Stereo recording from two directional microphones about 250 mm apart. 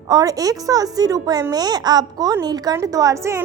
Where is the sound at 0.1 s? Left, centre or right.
Centre.